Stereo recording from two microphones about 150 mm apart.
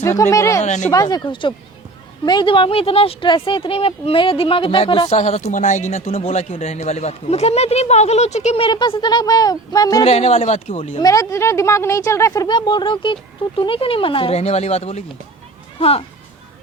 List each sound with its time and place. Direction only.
0.0 s a woman's voice: 20° left (ahead or behind)
0.6 s speech: 50° left (ahead or behind)
0.9 s speech: 25° left (ahead or behind)
10.1 s speech: 45° left (ahead or behind)
11.0 s a woman's voice: 20° left (ahead or behind); by 16.0 s 40° left (ahead or behind)